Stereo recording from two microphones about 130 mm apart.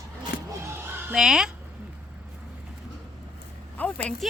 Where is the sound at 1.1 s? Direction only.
5° right (ahead or behind).